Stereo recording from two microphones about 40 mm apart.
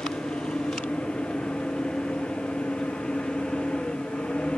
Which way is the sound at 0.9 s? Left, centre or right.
Left.